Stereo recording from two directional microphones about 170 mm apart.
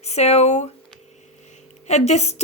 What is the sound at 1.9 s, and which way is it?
Speech, 40° left (ahead or behind).